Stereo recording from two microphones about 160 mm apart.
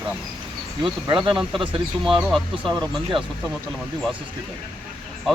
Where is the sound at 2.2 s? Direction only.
Centre (ahead or behind).